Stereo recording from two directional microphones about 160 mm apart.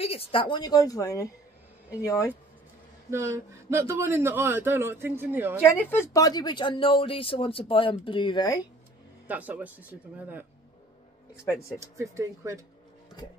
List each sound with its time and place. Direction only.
0.0 s a woman's voice: 35° left (ahead or behind); by 2.2 s 20° left (ahead or behind)
3.1 s a man's voice: 15° right (ahead or behind)
5.6 s speech: 15° left (ahead or behind)
9.3 s a man's voice: 10° right (ahead or behind)
11.8 s speech: 20° right (ahead or behind)